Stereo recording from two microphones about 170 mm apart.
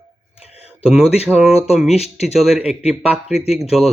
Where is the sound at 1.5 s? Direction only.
40° left (ahead or behind).